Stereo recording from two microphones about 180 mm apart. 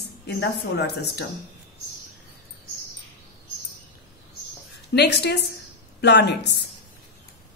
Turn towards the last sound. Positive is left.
turn(degrees=70)  # may be behind; listen again after turning